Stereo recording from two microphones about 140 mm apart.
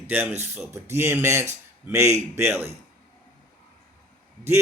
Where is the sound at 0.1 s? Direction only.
15° right (ahead or behind).